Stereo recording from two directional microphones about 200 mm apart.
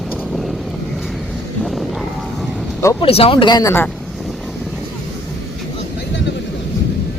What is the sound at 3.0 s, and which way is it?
Speech, 30° left (ahead or behind).